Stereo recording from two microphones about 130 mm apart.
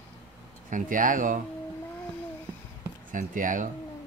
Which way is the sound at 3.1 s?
90° right.